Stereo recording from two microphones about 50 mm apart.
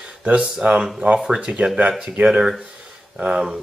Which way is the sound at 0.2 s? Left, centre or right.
Centre.